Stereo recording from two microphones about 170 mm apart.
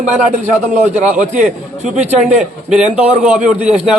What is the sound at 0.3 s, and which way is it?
A man's voice, 45° right (ahead or behind).